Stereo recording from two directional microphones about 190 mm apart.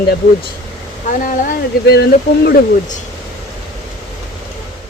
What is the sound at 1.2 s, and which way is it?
Speech, 45° left (ahead or behind).